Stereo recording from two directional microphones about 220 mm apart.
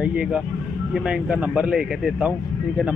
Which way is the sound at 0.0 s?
5° right (ahead or behind).